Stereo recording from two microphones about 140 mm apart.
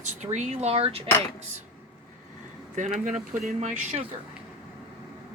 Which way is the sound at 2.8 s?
65° right (ahead or behind).